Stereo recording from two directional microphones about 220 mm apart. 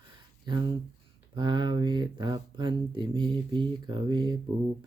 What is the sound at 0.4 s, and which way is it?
Speech, 20° right (ahead or behind).